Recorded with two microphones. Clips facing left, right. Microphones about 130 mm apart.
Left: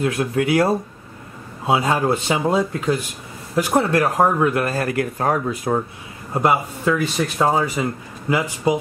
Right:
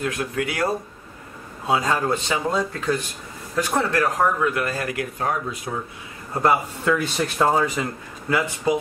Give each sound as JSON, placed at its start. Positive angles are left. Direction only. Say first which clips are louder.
{"t": 0.0, "sound": "speech", "louder": "left 5 dB", "side_deg": 30}
{"t": 1.8, "sound": "a man's voice", "louder": "left 3 dB", "side_deg": 15}
{"t": 2.0, "sound": "speech", "louder": "left 4 dB", "side_deg": 25}
{"t": 2.5, "sound": "a man's voice", "louder": "left 4 dB", "side_deg": 15}
{"t": 4.2, "sound": "speech", "louder": "left 4 dB", "side_deg": 30}
{"t": 6.8, "sound": "a man's voice", "louder": "left 2 dB", "side_deg": 0}